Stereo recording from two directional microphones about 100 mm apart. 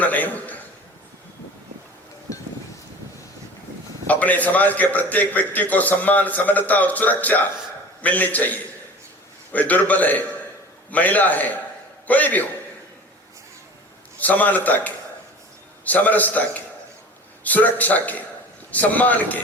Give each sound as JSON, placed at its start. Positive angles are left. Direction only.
{"t": 0.0, "sound": "a sound", "side_deg": 15}
{"t": 4.0, "sound": "a man's voice", "side_deg": 15}
{"t": 14.2, "sound": "a man's voice", "side_deg": 15}